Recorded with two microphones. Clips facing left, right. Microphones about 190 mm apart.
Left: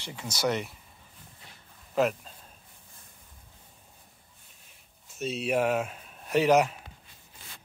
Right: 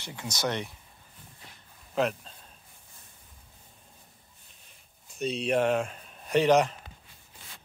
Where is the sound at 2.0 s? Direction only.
5° left (ahead or behind).